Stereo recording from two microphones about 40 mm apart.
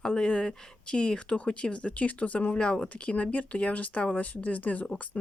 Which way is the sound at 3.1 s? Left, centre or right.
Left.